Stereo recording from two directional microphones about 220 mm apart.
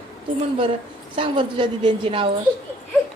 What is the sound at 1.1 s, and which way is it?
A woman's voice, 20° right (ahead or behind).